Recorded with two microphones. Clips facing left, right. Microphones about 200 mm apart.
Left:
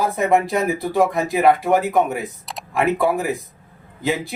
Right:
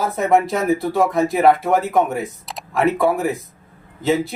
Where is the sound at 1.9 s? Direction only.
Centre (ahead or behind).